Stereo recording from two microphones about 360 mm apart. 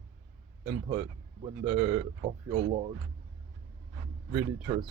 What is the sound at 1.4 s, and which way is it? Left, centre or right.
Speech, centre.